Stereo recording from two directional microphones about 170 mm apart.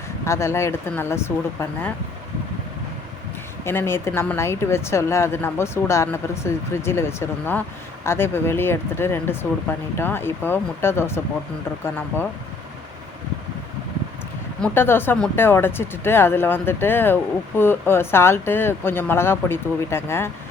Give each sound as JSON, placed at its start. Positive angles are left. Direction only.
{"t": 0.3, "sound": "speech", "side_deg": 15}
{"t": 3.6, "sound": "speech", "side_deg": 15}
{"t": 14.6, "sound": "speech", "side_deg": 15}